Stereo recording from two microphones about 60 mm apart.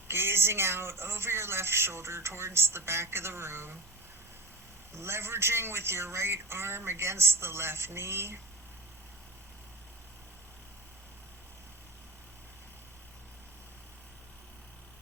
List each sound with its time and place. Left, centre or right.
0.1 s speech: right
4.9 s speech: right